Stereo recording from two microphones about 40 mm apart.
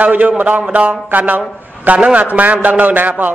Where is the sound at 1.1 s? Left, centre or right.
Right.